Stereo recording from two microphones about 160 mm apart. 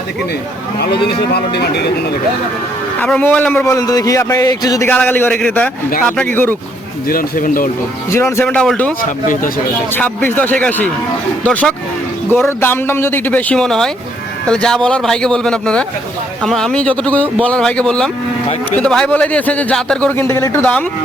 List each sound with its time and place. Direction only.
0.8 s speech: 90° left
3.0 s a man's voice: 10° left (ahead or behind)
4.9 s speech: 10° left (ahead or behind)
7.1 s speech: 60° left (ahead or behind)
8.1 s speech: 15° left (ahead or behind)
8.4 s speech: 5° left (ahead or behind)
10.0 s speech: 10° left (ahead or behind)